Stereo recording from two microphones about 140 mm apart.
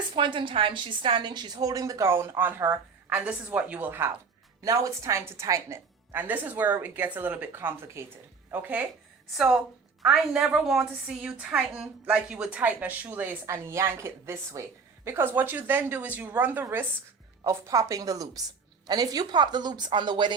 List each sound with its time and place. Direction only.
0.1 s a woman's voice: 35° right (ahead or behind); by 8.9 s 10° right (ahead or behind)
10.0 s a woman's voice: 5° right (ahead or behind); by 20.3 s 35° right (ahead or behind)